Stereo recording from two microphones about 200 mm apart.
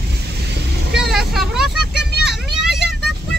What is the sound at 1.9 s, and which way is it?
Vehicle, 55° right (ahead or behind).